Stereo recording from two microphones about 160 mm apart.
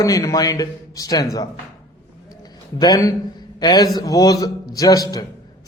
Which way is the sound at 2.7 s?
25° left (ahead or behind).